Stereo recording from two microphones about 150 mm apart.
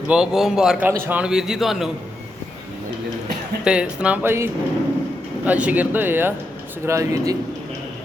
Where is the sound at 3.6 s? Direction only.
5° right (ahead or behind); by 7.4 s 20° right (ahead or behind).